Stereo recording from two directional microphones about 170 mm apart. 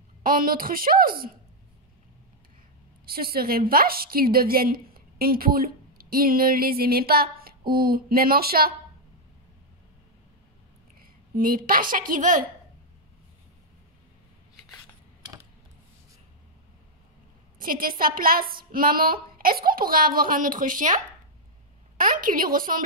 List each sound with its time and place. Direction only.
0.2 s a woman's voice: 55° right (ahead or behind)
3.1 s a woman's voice: 60° right (ahead or behind)
11.0 s a woman's voice: 55° right (ahead or behind)
17.6 s a woman's voice: 55° right (ahead or behind)